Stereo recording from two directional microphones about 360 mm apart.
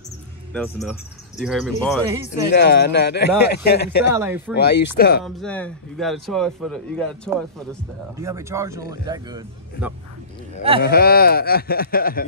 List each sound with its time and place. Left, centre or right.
0.5 s a man's voice: centre
2.2 s speech: left
4.2 s a man's voice: centre
4.6 s speech: left
5.2 s a man's voice: centre
10.8 s speech: left